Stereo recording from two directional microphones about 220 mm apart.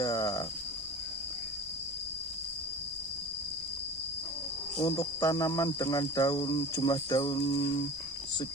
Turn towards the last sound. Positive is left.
turn(degrees=15)  # may be behind; listen again after turning